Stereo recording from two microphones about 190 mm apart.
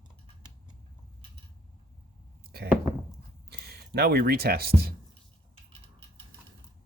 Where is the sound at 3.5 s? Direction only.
60° right (ahead or behind).